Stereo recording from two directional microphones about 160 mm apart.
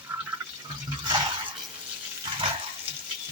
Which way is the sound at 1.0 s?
30° right (ahead or behind).